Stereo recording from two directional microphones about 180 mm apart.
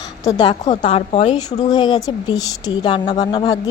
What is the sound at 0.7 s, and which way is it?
Speech, 35° left (ahead or behind).